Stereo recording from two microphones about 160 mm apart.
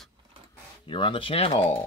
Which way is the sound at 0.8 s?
30° left (ahead or behind).